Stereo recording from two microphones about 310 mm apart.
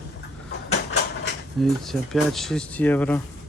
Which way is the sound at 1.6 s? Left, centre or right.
Centre.